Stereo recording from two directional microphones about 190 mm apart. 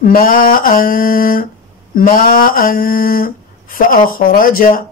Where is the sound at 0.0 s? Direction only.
50° left (ahead or behind).